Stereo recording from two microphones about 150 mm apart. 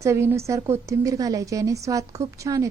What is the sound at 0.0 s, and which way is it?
A woman's voice, 20° right (ahead or behind).